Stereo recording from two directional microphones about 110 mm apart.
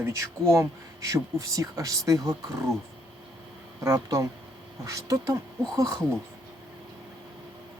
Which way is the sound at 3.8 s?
30° right (ahead or behind).